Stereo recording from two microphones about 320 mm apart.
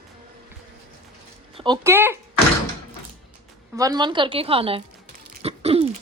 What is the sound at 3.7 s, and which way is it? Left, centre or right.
A woman's voice, centre.